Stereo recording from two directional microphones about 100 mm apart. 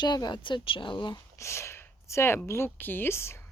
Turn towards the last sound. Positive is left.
turn(degrees=25)  # may be behind; listen again after turning